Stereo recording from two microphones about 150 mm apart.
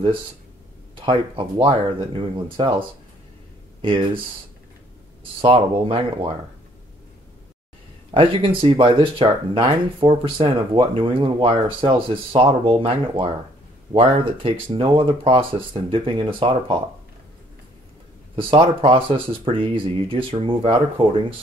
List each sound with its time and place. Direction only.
0.9 s speech: 35° right (ahead or behind)
3.8 s speech: 35° right (ahead or behind)
5.4 s speech: 35° right (ahead or behind)
8.1 s speech: 35° right (ahead or behind)
18.3 s speech: 35° right (ahead or behind)